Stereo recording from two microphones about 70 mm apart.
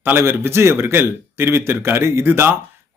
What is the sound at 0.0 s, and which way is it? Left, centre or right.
Speech, right.